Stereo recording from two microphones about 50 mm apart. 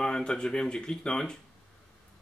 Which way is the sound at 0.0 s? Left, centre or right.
Centre.